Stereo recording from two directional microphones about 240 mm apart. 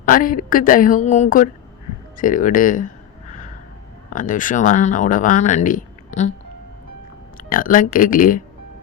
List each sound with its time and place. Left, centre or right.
0.0 s speech: left
4.1 s speech: left
7.5 s speech: left